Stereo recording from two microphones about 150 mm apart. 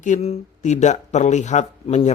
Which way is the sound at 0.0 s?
50° left (ahead or behind).